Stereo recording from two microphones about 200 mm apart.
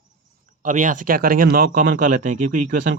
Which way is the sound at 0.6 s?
40° right (ahead or behind).